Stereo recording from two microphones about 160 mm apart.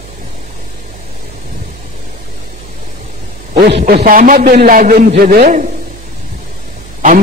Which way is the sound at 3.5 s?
80° right.